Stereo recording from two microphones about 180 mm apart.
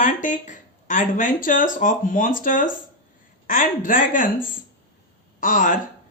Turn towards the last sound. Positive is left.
turn(degrees=50)  # may be behind; listen again after turning